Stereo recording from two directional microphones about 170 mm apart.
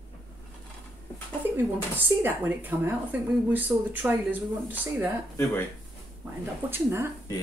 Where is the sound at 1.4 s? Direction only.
10° right (ahead or behind).